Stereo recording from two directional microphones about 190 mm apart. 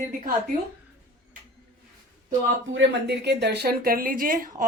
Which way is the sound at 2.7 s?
60° right (ahead or behind).